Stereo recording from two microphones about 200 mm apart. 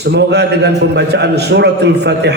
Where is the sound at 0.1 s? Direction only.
55° right (ahead or behind).